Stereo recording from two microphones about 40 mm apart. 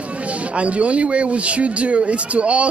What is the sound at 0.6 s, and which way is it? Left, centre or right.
Speech, right.